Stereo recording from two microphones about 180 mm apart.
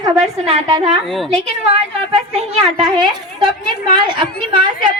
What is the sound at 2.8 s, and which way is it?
A woman's voice, 25° right (ahead or behind).